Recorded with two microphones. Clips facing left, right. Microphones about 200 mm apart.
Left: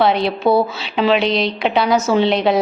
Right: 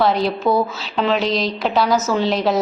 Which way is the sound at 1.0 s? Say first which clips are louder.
Left 4 dB; 75° left (ahead or behind).